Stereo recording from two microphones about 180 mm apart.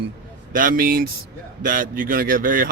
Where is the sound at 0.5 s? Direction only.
50° right (ahead or behind).